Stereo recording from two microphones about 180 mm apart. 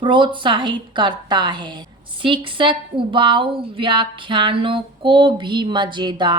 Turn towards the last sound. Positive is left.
turn(degrees=-25)  # may be behind; listen again after turning